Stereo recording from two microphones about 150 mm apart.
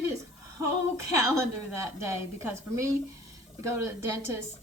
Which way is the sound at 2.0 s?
20° right (ahead or behind).